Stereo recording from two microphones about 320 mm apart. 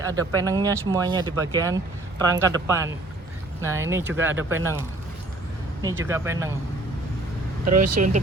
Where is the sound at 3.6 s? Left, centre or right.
Centre.